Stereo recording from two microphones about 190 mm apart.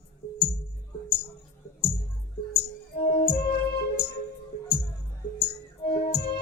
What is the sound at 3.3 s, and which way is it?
Music, 55° left (ahead or behind).